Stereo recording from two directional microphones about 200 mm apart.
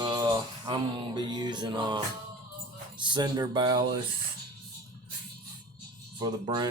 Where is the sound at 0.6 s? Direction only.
25° right (ahead or behind).